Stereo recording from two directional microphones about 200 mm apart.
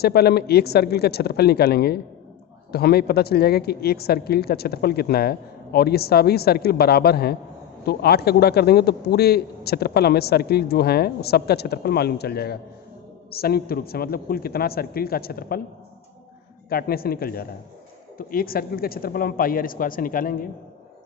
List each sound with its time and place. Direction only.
0.0 s a man's voice: 50° left (ahead or behind)
16.6 s a man's voice: 50° left (ahead or behind)